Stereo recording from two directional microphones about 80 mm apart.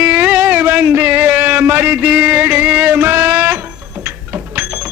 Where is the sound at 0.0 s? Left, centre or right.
Centre.